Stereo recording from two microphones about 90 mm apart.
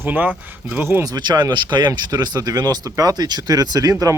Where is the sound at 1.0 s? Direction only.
50° right (ahead or behind).